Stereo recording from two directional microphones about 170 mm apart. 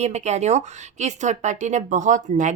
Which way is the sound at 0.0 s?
40° right (ahead or behind).